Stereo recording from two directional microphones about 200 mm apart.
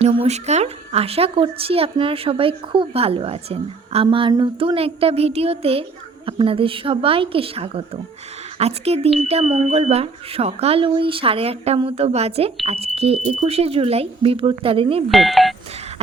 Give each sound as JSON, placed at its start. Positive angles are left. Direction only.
{"t": 0.0, "sound": "a woman's voice", "side_deg": -30}
{"t": 15.1, "sound": "speech", "side_deg": 0}